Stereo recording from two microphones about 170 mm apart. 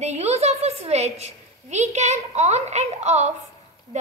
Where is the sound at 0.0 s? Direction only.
40° right (ahead or behind).